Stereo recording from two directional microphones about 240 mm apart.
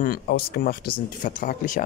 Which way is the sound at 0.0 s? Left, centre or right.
Left.